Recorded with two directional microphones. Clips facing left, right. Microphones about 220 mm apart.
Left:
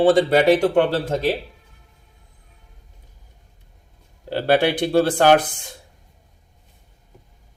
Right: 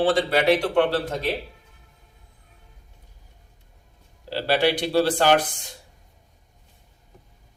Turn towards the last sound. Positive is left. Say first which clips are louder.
# left 4 dB
turn(degrees=55)  # may be behind; listen again after turning